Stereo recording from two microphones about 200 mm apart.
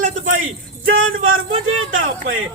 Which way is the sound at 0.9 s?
85° right.